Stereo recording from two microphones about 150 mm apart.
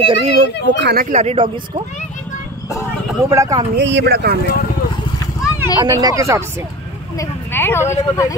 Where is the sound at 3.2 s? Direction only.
20° right (ahead or behind).